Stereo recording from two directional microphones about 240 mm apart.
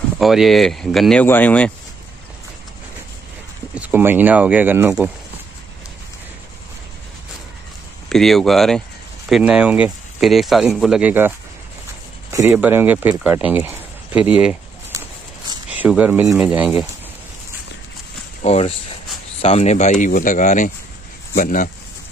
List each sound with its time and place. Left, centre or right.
0.2 s speech: centre
3.7 s speech: centre
8.1 s speech: centre
18.4 s speech: left